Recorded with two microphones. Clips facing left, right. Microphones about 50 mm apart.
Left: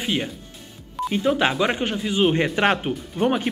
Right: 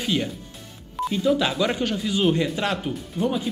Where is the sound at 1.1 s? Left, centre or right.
Left.